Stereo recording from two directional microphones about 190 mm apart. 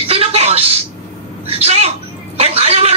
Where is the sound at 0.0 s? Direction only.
30° right (ahead or behind).